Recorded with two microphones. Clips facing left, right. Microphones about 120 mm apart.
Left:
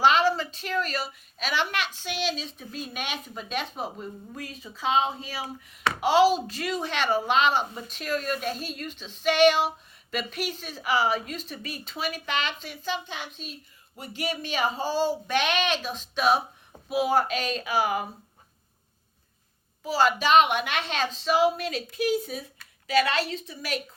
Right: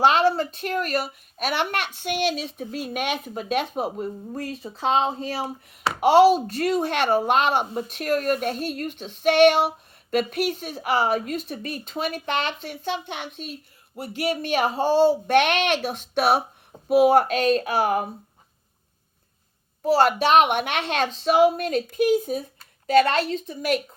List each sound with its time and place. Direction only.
0.0 s speech: 60° right (ahead or behind)
4.4 s speech: 65° right (ahead or behind)
4.8 s a woman's voice: 45° right (ahead or behind)
5.9 s speech: 60° right (ahead or behind)
19.8 s a woman's voice: 60° right (ahead or behind)